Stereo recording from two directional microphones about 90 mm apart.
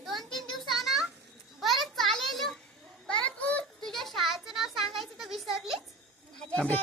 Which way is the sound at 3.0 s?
15° left (ahead or behind).